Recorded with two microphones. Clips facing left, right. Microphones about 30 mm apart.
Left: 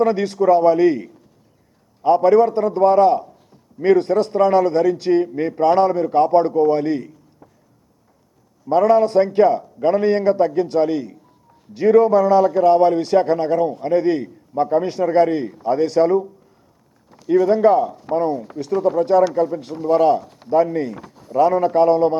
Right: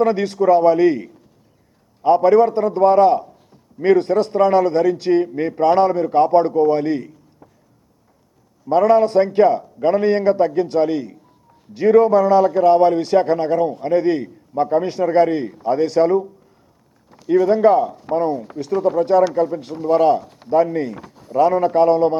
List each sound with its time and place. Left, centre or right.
0.0 s speech: right
8.6 s speech: right